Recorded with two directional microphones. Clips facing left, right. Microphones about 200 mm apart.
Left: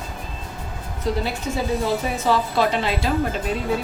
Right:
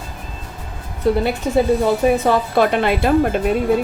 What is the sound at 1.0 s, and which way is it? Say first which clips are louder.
Speech: right 7 dB; 60° right (ahead or behind).